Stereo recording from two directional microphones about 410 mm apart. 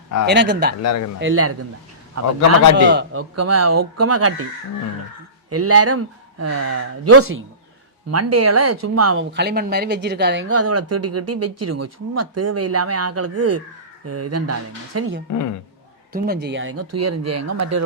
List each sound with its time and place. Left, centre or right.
0.3 s speech: right
0.8 s speech: left
1.2 s speech: right
2.7 s speech: right
5.5 s speech: right
9.3 s speech: right
15.3 s speech: left
16.1 s speech: right